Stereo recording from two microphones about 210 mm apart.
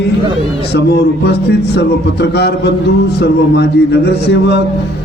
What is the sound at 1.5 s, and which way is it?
A man's voice, 50° left (ahead or behind).